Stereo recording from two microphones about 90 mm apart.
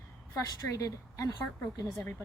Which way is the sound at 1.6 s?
25° left (ahead or behind).